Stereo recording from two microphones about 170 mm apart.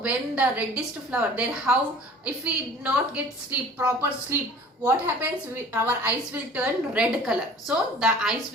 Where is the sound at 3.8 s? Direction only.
15° right (ahead or behind).